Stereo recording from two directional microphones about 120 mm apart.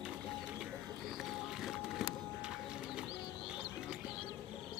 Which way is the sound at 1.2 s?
Centre (ahead or behind).